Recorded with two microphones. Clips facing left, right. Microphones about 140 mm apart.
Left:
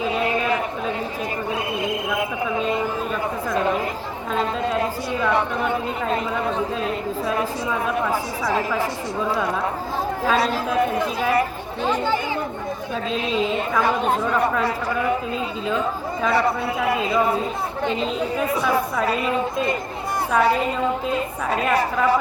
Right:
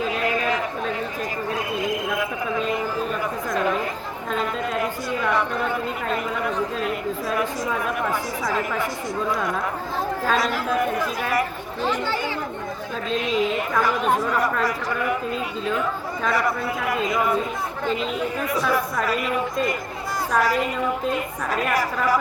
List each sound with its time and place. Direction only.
1.8 s a sound: 25° left (ahead or behind)
5.3 s a man's voice: 25° left (ahead or behind)
7.9 s a woman's voice: 30° left (ahead or behind)
10.3 s a man's voice: 30° left (ahead or behind)
13.8 s a man's voice: 25° left (ahead or behind)
16.3 s a man's voice: 25° left (ahead or behind)
20.4 s a man's voice: 25° left (ahead or behind)